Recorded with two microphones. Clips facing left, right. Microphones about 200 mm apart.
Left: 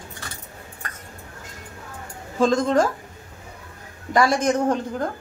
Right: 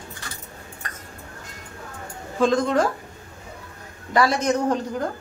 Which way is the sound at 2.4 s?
45° left (ahead or behind).